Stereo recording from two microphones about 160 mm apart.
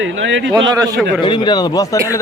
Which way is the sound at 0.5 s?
25° right (ahead or behind).